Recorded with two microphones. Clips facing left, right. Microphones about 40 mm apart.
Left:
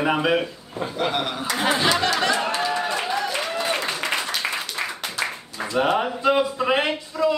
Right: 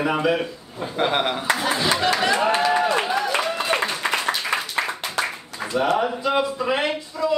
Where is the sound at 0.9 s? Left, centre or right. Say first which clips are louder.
Right 4 dB; right.